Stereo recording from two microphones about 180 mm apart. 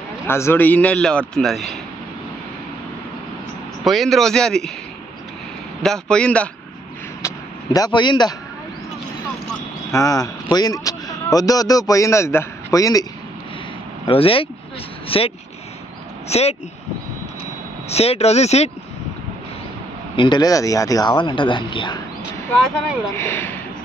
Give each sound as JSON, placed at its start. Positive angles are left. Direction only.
{"t": 0.3, "sound": "a man's voice", "side_deg": 15}
{"t": 3.8, "sound": "speech", "side_deg": 0}
{"t": 5.8, "sound": "speech", "side_deg": 5}
{"t": 7.2, "sound": "vehicle", "side_deg": 20}
{"t": 9.8, "sound": "speech", "side_deg": 20}
{"t": 14.0, "sound": "speech", "side_deg": 30}
{"t": 17.8, "sound": "speech", "side_deg": 35}
{"t": 20.2, "sound": "speech", "side_deg": 25}
{"t": 23.1, "sound": "a man's voice", "side_deg": 15}